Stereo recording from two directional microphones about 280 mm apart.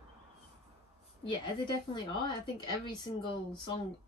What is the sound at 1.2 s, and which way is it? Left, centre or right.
Speech, centre.